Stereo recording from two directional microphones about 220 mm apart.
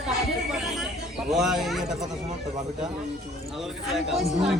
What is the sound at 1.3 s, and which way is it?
Speech, centre (ahead or behind).